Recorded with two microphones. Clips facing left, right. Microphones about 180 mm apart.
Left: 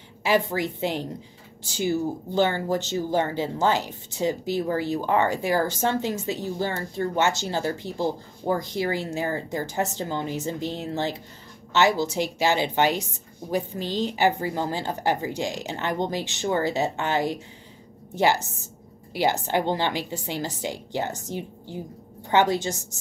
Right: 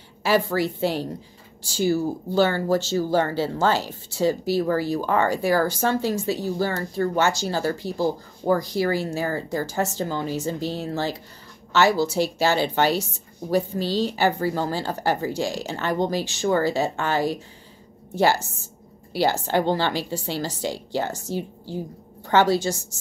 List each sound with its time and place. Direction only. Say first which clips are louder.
0.2 s a woman's voice: right 2 dB; 20° left (ahead or behind)